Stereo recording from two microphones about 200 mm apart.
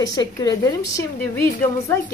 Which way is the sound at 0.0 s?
20° left (ahead or behind).